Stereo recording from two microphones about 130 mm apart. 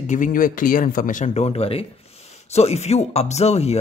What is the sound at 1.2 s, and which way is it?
Speech, 55° left (ahead or behind).